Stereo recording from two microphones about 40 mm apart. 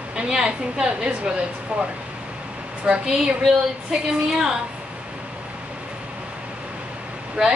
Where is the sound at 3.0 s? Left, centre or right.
Centre.